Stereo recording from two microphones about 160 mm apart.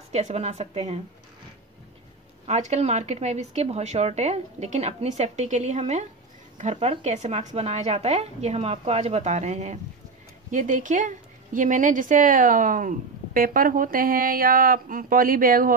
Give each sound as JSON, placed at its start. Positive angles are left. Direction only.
{"t": 0.1, "sound": "a woman's voice", "side_deg": -40}
{"t": 2.4, "sound": "a woman's voice", "side_deg": -45}